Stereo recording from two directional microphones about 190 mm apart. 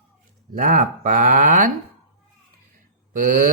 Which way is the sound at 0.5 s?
45° right (ahead or behind).